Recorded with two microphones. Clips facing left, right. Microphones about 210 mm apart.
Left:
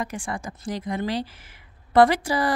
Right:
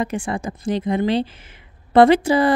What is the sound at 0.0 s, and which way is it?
Speech, 25° right (ahead or behind).